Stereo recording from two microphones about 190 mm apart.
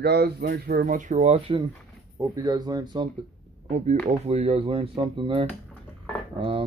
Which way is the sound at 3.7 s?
35° right (ahead or behind).